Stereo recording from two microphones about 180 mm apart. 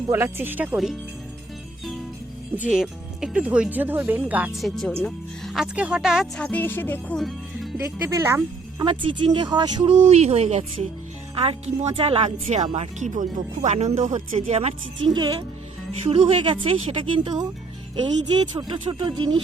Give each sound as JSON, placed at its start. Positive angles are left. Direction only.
{"t": 0.1, "sound": "speech", "side_deg": -15}
{"t": 2.6, "sound": "speech", "side_deg": 0}
{"t": 7.8, "sound": "speech", "side_deg": -15}
{"t": 8.8, "sound": "a woman's voice", "side_deg": -30}
{"t": 10.1, "sound": "a woman's voice", "side_deg": -35}
{"t": 18.7, "sound": "a woman's voice", "side_deg": -30}